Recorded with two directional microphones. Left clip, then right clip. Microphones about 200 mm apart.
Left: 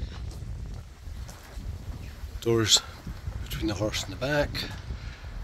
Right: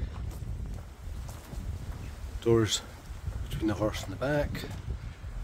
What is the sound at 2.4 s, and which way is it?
Speech, 5° right (ahead or behind).